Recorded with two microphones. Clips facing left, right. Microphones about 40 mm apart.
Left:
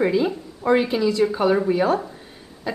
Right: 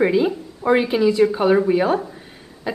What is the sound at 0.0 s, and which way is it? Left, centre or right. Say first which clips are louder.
A woman's voice: right 3 dB; centre.